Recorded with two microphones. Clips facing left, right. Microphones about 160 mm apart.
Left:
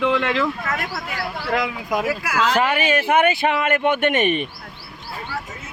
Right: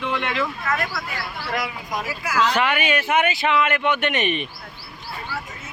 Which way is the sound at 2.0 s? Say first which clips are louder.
Left 5 dB; 65° left (ahead or behind).